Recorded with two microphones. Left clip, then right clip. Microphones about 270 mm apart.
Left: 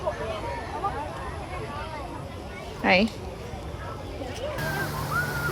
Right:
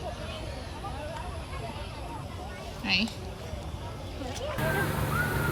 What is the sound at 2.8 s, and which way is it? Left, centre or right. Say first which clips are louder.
Speech: left 7 dB; centre.